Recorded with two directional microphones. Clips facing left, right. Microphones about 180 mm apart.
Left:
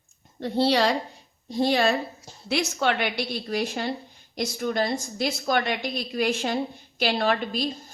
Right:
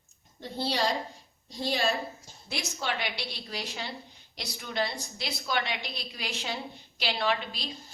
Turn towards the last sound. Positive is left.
turn(degrees=50)  # may be behind; listen again after turning